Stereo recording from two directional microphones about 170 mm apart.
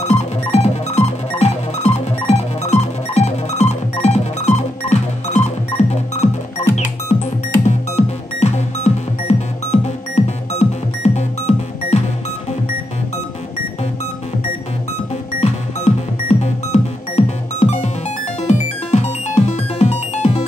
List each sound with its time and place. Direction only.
0.0 s music: 40° left (ahead or behind)
7.6 s music: 40° left (ahead or behind)
15.4 s music: 40° left (ahead or behind)